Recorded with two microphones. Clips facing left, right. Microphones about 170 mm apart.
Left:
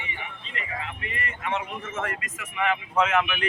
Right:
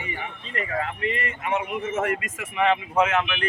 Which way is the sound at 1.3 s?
20° right (ahead or behind).